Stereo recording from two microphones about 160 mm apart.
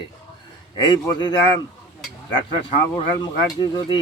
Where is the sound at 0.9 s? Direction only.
25° left (ahead or behind).